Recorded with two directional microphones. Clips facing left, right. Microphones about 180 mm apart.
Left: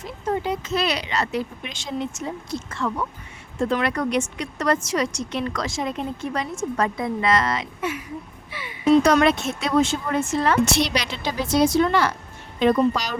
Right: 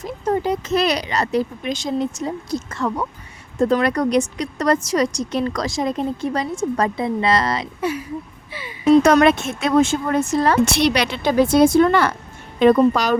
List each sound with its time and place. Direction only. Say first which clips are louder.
0.0 s a woman's voice: right 5 dB; 40° right (ahead or behind)
9.0 s speech: right 4 dB; 50° right (ahead or behind)
10.7 s a woman's voice: right 5 dB; 65° right (ahead or behind)